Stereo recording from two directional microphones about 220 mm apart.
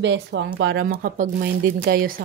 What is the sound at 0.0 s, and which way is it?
Speech, 55° right (ahead or behind).